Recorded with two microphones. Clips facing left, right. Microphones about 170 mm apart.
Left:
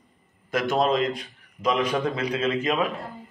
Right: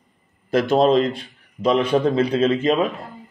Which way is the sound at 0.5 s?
30° right (ahead or behind).